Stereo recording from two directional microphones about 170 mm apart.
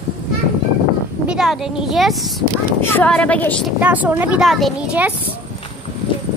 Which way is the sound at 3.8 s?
10° right (ahead or behind).